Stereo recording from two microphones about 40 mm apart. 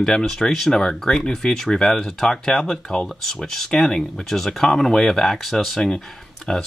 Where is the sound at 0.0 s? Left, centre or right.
Centre.